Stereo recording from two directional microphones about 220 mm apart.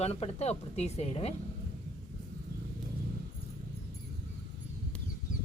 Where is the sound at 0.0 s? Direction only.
30° left (ahead or behind).